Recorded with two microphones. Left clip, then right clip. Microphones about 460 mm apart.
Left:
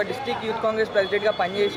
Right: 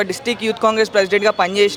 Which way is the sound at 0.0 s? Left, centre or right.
Right.